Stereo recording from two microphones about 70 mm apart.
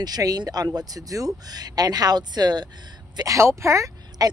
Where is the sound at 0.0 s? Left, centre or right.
Right.